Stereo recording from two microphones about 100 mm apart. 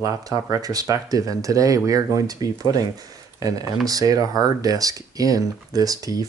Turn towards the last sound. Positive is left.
turn(degrees=-35)  # may be behind; listen again after turning